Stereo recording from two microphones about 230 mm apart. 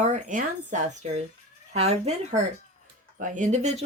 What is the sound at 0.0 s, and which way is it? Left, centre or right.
A woman's voice, right.